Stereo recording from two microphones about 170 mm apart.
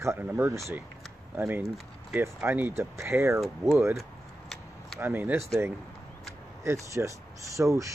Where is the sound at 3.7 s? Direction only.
15° right (ahead or behind).